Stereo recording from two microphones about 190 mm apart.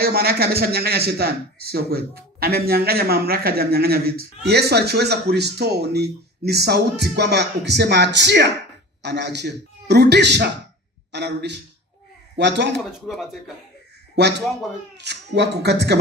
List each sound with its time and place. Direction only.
0.0 s a man's voice: 55° right (ahead or behind)
13.1 s speech: centre (ahead or behind)
14.2 s a man's voice: 60° right (ahead or behind)